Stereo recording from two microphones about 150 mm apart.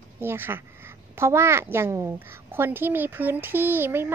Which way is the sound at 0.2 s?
15° right (ahead or behind).